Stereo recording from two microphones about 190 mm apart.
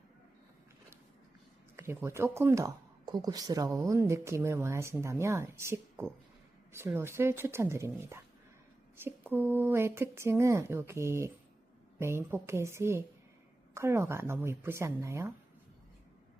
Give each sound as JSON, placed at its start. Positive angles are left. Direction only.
{"t": 1.7, "sound": "speech", "side_deg": -10}